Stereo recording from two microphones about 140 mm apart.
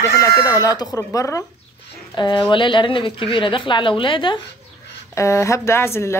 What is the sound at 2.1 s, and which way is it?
Speech, 30° left (ahead or behind).